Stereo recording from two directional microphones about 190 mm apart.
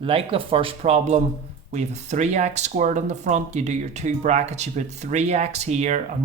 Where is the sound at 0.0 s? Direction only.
30° right (ahead or behind).